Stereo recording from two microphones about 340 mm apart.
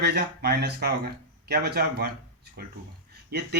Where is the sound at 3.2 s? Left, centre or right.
Right.